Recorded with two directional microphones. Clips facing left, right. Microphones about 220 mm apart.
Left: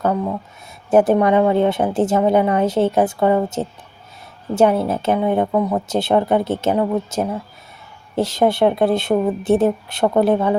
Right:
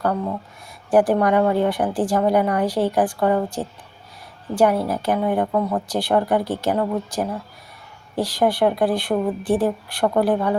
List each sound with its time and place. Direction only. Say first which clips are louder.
0.9 s a woman's voice: left 3 dB; 25° left (ahead or behind)